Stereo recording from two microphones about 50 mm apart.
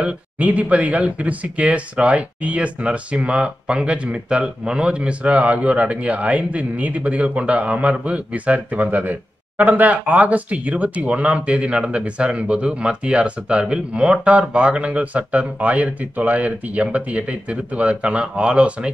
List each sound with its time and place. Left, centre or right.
0.0 s speech: right